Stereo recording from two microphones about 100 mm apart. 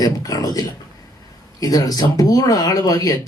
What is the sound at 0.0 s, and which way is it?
Speech, 40° left (ahead or behind).